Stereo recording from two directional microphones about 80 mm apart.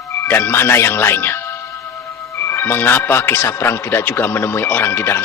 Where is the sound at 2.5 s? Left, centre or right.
Left.